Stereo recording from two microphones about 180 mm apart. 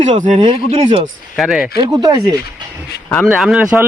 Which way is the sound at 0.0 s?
40° right (ahead or behind).